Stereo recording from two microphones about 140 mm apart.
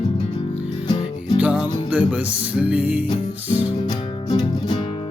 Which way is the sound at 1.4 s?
10° right (ahead or behind).